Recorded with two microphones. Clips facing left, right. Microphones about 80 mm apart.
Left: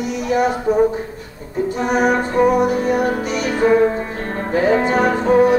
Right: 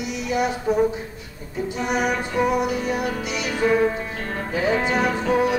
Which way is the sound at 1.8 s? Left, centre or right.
Left.